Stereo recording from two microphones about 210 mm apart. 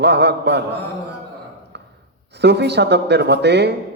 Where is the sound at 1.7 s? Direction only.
55° right (ahead or behind).